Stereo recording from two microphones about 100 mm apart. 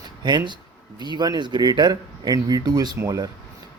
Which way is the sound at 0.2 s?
50° right (ahead or behind).